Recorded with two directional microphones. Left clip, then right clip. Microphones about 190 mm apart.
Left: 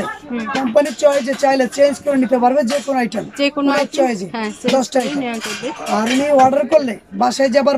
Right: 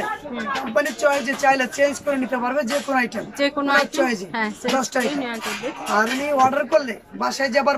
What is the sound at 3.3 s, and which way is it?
Speech, 5° left (ahead or behind).